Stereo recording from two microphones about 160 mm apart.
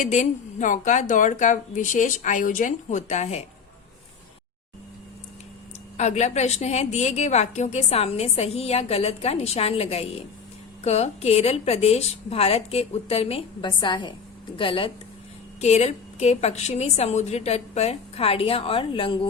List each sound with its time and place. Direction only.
0.0 s speech: 50° left (ahead or behind)
6.0 s a woman's voice: 45° left (ahead or behind)
15.6 s a woman's voice: 45° left (ahead or behind)